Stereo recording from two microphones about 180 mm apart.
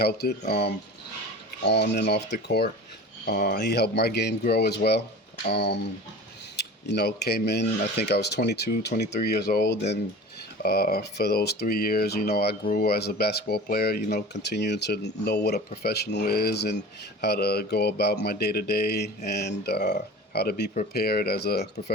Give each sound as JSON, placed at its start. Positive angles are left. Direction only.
{"t": 0.0, "sound": "speech", "side_deg": 60}
{"t": 3.2, "sound": "speech", "side_deg": 55}
{"t": 3.6, "sound": "speech", "side_deg": 65}